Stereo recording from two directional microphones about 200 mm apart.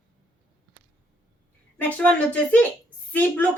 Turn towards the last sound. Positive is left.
turn(degrees=10)  # may be behind; listen again after turning